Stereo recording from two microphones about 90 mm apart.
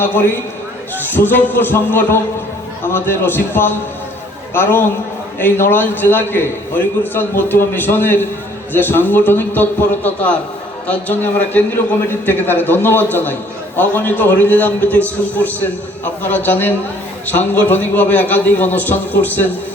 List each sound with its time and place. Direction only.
0.9 s a man's voice: 20° left (ahead or behind)